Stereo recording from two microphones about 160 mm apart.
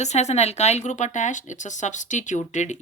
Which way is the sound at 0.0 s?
45° left (ahead or behind).